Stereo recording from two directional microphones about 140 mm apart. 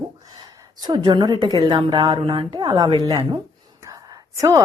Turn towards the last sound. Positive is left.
turn(degrees=-25)  # may be behind; listen again after turning